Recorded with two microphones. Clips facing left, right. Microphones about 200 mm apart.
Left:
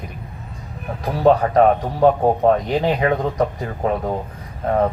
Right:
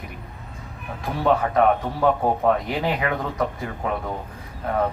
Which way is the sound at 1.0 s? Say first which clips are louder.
Left 6 dB; 40° left (ahead or behind).